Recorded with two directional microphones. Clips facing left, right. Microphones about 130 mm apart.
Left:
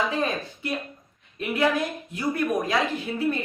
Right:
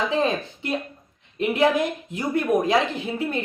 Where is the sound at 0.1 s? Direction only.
20° right (ahead or behind).